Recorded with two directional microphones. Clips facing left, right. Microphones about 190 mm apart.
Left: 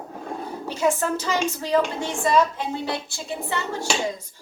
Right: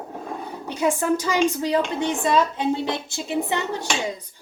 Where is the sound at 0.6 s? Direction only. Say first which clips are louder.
Right 1 dB; 15° right (ahead or behind).